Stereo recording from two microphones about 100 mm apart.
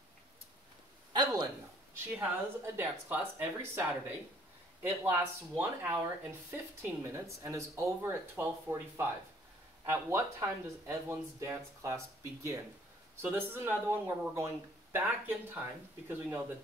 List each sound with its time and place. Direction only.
1.1 s a sound: 45° right (ahead or behind)
2.0 s speech: 25° right (ahead or behind)
5.1 s speech: 20° right (ahead or behind)